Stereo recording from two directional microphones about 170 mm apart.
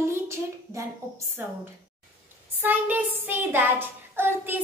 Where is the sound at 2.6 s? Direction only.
10° right (ahead or behind).